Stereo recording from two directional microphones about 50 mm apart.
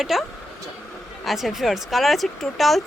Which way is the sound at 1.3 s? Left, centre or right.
Centre.